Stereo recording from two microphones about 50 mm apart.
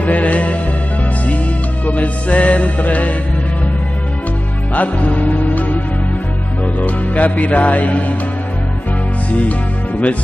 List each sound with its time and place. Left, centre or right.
0.0 s music: left
1.9 s music: left
4.7 s music: left
6.8 s music: left
9.3 s speech: left